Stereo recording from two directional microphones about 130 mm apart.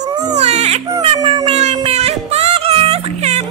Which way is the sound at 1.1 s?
40° right (ahead or behind).